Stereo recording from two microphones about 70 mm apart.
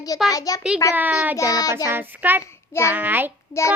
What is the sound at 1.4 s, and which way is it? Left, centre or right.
Speech, left.